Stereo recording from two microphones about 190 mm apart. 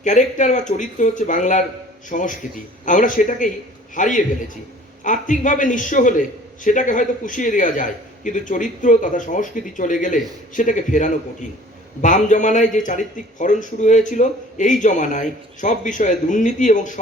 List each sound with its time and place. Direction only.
0.0 s a man's voice: 40° left (ahead or behind)